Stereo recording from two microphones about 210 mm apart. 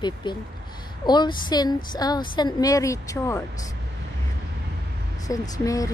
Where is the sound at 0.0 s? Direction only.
20° left (ahead or behind).